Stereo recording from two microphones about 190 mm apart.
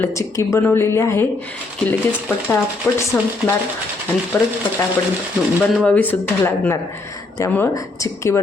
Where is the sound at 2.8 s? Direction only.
5° left (ahead or behind).